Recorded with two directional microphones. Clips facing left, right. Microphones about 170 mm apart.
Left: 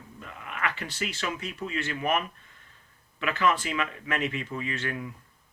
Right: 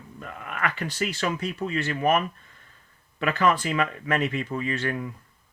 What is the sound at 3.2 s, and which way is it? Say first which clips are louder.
Speech: right 3 dB; 40° right (ahead or behind).